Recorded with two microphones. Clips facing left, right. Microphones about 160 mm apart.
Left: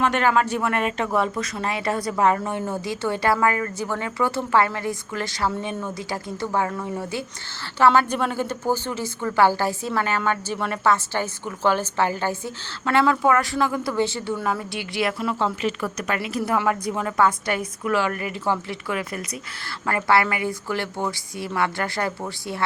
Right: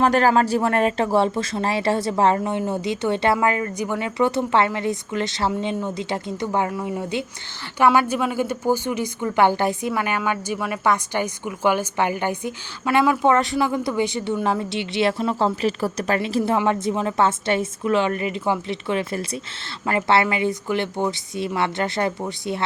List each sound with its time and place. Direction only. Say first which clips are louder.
0.0 s a woman's voice: right 3 dB; 35° right (ahead or behind)